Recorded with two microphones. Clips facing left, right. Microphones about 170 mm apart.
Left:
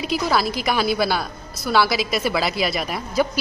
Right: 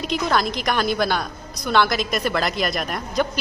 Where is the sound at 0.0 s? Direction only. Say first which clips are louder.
Left 1 dB; 5° left (ahead or behind).